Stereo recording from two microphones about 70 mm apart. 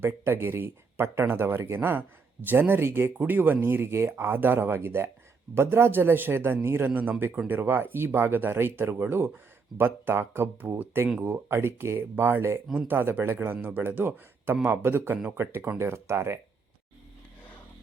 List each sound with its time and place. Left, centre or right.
0.0 s speech: right